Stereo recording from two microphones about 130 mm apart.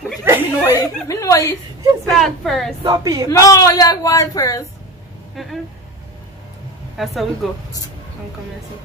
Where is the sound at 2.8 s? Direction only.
25° right (ahead or behind).